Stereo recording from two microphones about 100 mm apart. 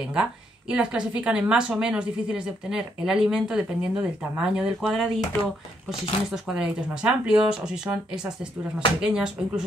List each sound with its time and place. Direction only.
0.0 s a woman's voice: 10° right (ahead or behind)
5.4 s speech: 70° left (ahead or behind)
6.3 s speech: 5° right (ahead or behind)